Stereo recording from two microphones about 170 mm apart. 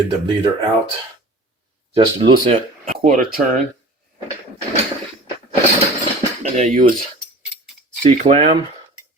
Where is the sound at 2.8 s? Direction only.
45° right (ahead or behind).